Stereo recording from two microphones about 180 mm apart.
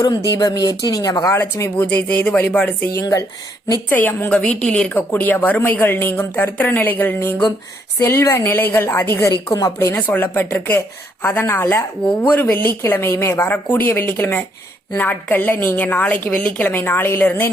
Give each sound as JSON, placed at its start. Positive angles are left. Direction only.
{"t": 0.3, "sound": "a woman's voice", "side_deg": 20}